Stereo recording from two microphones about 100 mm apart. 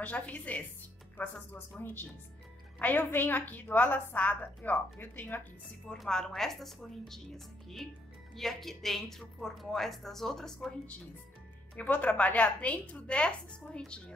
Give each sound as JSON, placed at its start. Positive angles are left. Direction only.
{"t": 0.0, "sound": "a woman's voice", "side_deg": 15}
{"t": 1.8, "sound": "a woman's voice", "side_deg": 20}
{"t": 5.9, "sound": "a woman's voice", "side_deg": 5}
{"t": 11.7, "sound": "a woman's voice", "side_deg": 15}